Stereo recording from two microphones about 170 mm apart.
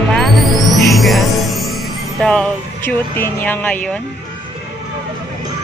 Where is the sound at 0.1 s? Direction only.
Centre (ahead or behind).